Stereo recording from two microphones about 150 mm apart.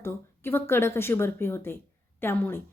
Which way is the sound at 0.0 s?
15° left (ahead or behind).